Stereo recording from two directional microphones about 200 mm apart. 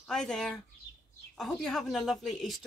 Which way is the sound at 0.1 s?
5° left (ahead or behind).